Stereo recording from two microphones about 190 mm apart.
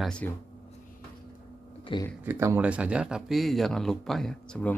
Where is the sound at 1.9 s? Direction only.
25° left (ahead or behind).